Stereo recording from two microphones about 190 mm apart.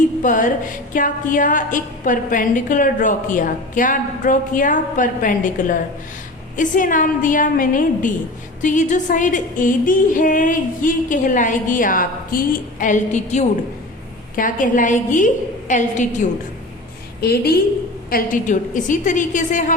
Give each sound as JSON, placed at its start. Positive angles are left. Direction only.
{"t": 0.2, "sound": "a woman's voice", "side_deg": 45}
{"t": 17.2, "sound": "a woman's voice", "side_deg": 55}
{"t": 18.1, "sound": "a woman's voice", "side_deg": 45}